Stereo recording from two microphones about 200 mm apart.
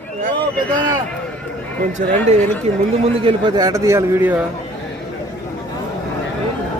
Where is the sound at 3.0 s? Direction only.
30° right (ahead or behind); by 4.5 s 10° right (ahead or behind).